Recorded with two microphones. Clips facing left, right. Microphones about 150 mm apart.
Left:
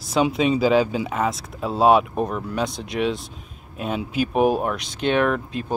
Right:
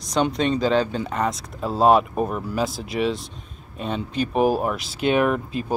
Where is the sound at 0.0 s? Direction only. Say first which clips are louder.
Left 2 dB; 5° left (ahead or behind).